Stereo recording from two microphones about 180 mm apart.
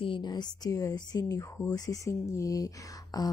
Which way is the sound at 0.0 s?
25° left (ahead or behind).